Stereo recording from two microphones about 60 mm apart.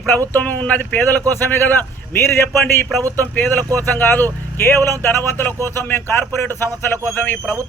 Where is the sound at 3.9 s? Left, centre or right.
Left.